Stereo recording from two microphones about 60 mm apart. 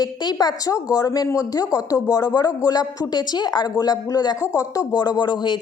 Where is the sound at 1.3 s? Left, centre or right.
Left.